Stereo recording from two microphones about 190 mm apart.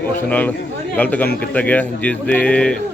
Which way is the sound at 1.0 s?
10° left (ahead or behind).